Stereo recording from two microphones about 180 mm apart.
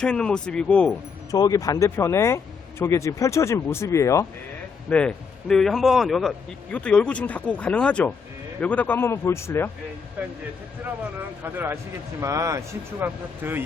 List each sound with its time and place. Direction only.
0.0 s a man's voice: 5° left (ahead or behind)
1.3 s speech: 20° left (ahead or behind)
4.9 s a man's voice: 5° left (ahead or behind)
11.5 s speech: 15° right (ahead or behind)